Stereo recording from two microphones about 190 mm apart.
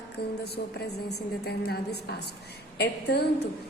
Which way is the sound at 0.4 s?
60° left (ahead or behind).